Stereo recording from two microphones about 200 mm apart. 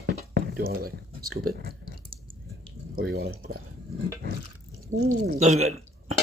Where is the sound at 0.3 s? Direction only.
50° right (ahead or behind).